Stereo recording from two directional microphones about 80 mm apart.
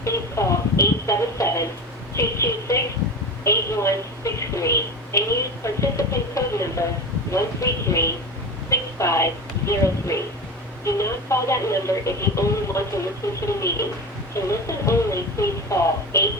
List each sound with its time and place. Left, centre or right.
0.0 s a woman's voice: left